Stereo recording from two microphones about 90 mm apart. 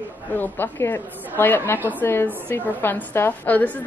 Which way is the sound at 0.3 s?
20° left (ahead or behind).